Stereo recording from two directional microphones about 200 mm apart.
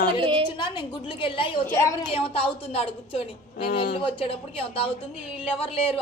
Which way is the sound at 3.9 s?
25° left (ahead or behind).